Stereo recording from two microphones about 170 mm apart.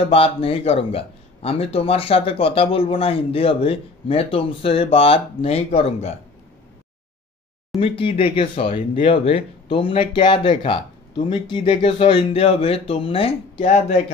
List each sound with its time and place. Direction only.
0.1 s speech: 35° left (ahead or behind)
7.8 s speech: 30° left (ahead or behind)